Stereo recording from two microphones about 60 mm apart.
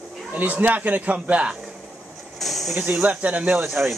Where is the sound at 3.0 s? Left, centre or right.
Right.